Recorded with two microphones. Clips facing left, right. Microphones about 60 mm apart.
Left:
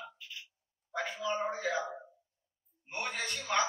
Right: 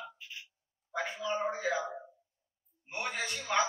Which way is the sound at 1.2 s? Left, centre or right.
Centre.